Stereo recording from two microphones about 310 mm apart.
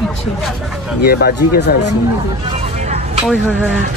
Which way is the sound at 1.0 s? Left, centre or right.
Left.